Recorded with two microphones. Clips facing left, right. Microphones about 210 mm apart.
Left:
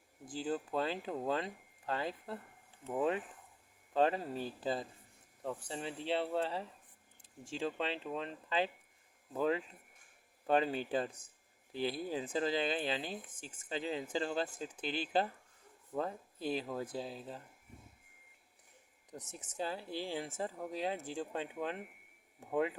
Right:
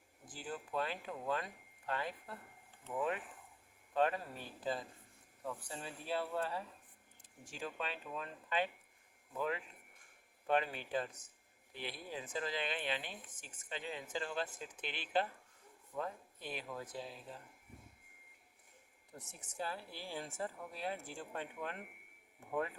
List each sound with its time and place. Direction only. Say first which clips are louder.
0.3 s speech: left 8 dB; 30° left (ahead or behind)
19.1 s speech: left 4 dB; 20° left (ahead or behind)